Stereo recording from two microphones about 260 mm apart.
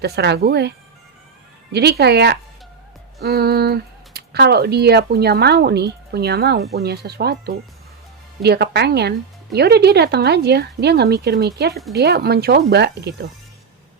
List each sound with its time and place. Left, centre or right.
0.0 s speech: right
1.7 s speech: right